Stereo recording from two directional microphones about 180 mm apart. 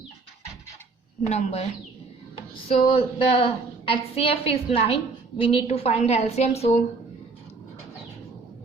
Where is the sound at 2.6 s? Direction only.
30° left (ahead or behind).